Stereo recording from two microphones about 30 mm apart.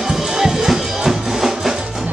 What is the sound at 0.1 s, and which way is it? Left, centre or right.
Music, centre.